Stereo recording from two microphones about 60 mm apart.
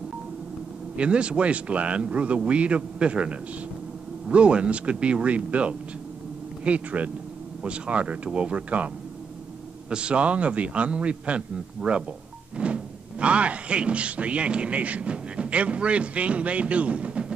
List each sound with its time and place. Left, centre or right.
0.9 s speech: centre